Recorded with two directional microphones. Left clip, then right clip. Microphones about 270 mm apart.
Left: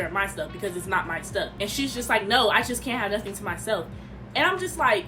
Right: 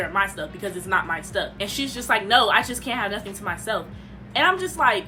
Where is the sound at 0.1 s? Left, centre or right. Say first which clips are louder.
Right 4 dB; centre.